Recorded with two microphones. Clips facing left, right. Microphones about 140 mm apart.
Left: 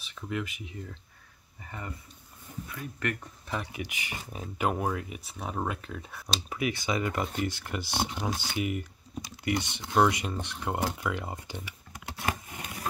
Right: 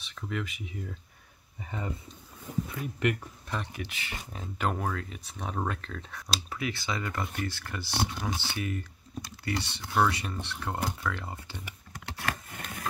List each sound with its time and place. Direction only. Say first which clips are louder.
0.0 s speech: left 1 dB; 5° left (ahead or behind)
1.6 s speech: right 4 dB; 20° right (ahead or behind)
3.4 s speech: left 1 dB; 10° left (ahead or behind)
5.2 s speech: even; 5° left (ahead or behind)
12.2 s a sound: left 2 dB; 15° left (ahead or behind)